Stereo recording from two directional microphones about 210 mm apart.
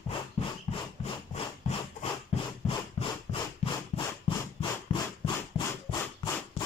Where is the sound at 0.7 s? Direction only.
25° left (ahead or behind).